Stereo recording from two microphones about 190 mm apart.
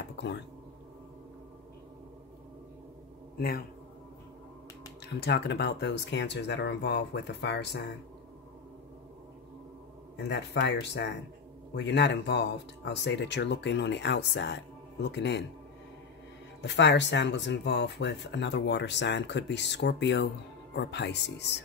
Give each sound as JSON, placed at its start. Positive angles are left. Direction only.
{"t": 3.3, "sound": "a man's voice", "side_deg": 55}
{"t": 5.0, "sound": "speech", "side_deg": 60}
{"t": 10.1, "sound": "speech", "side_deg": 65}
{"t": 16.6, "sound": "speech", "side_deg": 65}